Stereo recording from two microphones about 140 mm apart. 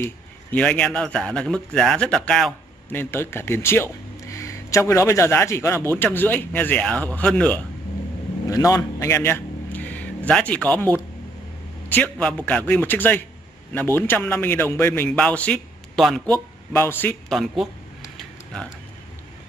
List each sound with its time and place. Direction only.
0.0 s speech: 10° left (ahead or behind)
2.9 s speech: 15° left (ahead or behind)
8.5 s a man's voice: 25° left (ahead or behind); by 16.2 s 5° left (ahead or behind)
16.7 s speech: 15° left (ahead or behind)
17.3 s speech: centre (ahead or behind)
18.1 s a sound: 5° left (ahead or behind)